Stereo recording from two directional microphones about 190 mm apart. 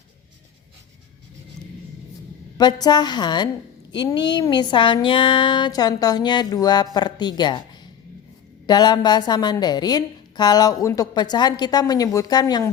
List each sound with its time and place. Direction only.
2.6 s a woman's voice: 20° left (ahead or behind)